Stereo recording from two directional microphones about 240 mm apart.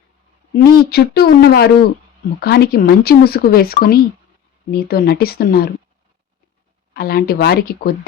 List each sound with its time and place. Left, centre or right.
0.5 s speech: left
6.9 s speech: left